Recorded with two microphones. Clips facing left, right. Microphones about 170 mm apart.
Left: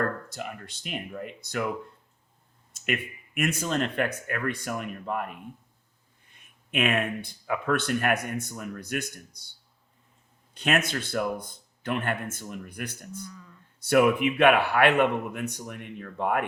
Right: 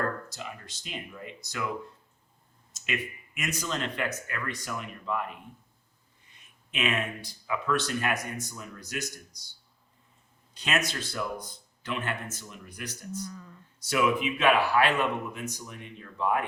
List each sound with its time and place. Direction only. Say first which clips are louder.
0.3 s speech: left 4 dB; 55° left (ahead or behind)
2.7 s a sound: left 3 dB; 55° left (ahead or behind)
3.6 s speech: left 2 dB; 55° left (ahead or behind)
6.3 s speech: left 7 dB; 55° left (ahead or behind)
10.5 s speech: left 4 dB; 55° left (ahead or behind)